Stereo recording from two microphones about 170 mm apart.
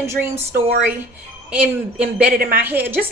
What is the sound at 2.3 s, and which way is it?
Speech, 60° right (ahead or behind).